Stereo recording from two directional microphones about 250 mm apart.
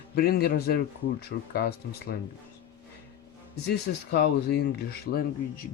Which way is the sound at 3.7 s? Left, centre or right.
Left.